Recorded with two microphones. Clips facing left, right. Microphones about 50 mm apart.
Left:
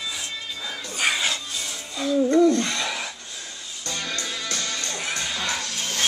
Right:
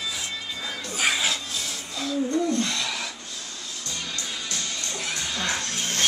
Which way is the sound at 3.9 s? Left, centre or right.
Left.